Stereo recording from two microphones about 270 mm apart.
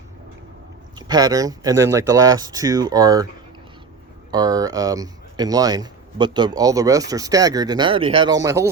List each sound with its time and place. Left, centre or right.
0.9 s speech: centre
4.3 s speech: centre